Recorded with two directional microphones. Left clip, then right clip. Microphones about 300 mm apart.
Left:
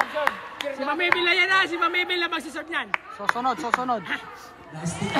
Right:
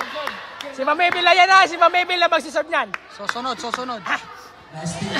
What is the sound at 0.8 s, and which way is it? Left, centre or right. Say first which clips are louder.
A man's voice: right 6 dB; centre.